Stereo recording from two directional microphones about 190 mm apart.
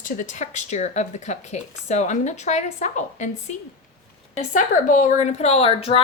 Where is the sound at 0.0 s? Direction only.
40° left (ahead or behind).